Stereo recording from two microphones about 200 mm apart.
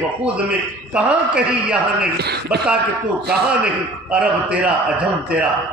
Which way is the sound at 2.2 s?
55° right (ahead or behind).